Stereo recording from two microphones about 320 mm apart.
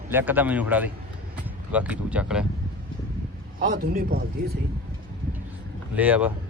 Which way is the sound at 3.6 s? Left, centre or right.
Right.